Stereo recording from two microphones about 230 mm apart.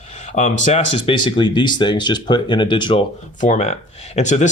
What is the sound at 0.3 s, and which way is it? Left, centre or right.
Speech, left.